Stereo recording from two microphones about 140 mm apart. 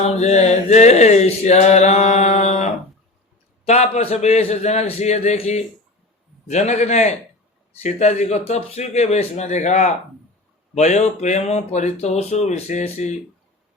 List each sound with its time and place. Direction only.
0.0 s mantra: 55° left (ahead or behind)
3.7 s mantra: 50° left (ahead or behind)